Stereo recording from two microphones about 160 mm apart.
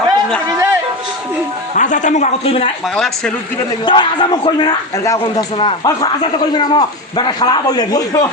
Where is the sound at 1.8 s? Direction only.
50° left (ahead or behind).